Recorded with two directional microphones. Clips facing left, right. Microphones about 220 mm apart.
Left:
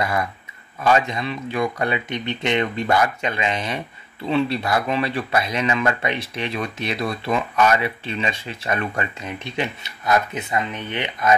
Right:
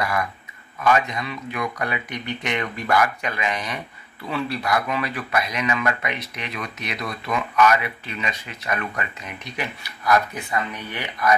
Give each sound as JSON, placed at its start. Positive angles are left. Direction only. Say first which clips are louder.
{"t": 0.8, "sound": "speech", "louder": "left 2 dB", "side_deg": 30}